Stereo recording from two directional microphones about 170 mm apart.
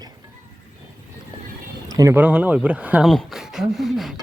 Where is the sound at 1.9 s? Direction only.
20° right (ahead or behind).